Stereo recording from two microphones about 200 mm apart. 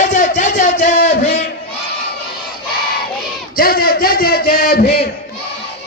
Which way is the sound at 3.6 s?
50° left (ahead or behind).